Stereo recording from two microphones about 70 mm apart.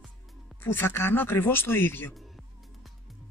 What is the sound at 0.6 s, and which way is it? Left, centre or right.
Speech, left.